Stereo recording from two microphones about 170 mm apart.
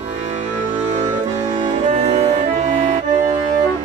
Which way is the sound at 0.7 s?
40° right (ahead or behind).